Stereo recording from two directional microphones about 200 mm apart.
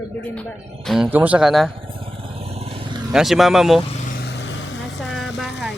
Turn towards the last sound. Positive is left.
turn(degrees=0)  # may be behind; listen again after turning